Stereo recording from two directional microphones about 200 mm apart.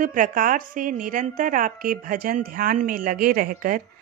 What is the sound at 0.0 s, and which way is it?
A woman's voice, 40° right (ahead or behind).